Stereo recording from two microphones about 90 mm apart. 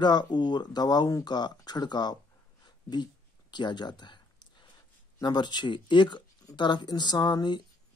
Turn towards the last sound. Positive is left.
turn(degrees=55)  # may be behind; listen again after turning